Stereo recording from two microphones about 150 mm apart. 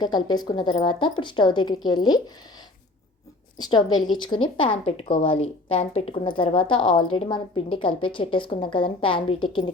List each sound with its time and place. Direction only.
0.0 s a woman's voice: 30° left (ahead or behind)
3.6 s a woman's voice: 30° left (ahead or behind)